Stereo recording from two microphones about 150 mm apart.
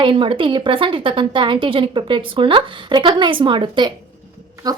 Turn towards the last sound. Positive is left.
turn(degrees=-25)  # may be behind; listen again after turning